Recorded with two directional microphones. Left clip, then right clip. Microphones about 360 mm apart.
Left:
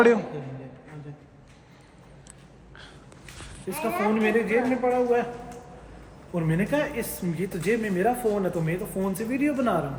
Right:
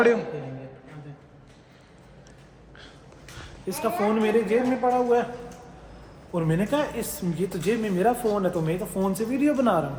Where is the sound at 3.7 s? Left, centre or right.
Centre.